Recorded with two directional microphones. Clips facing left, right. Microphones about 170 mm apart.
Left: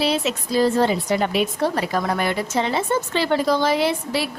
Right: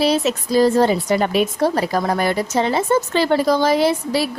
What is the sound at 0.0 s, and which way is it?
A woman's voice, 40° right (ahead or behind).